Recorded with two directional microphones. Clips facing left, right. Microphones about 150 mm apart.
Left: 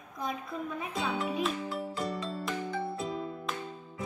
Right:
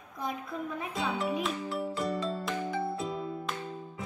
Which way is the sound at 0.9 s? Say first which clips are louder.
Right 1 dB; centre (ahead or behind).